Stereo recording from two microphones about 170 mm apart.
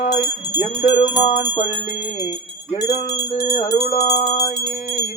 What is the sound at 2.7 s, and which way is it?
Music, 25° left (ahead or behind).